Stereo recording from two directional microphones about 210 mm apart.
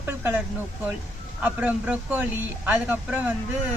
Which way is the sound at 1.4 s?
5° right (ahead or behind).